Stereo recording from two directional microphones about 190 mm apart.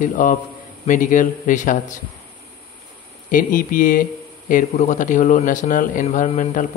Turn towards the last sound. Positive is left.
turn(degrees=40)  # may be behind; listen again after turning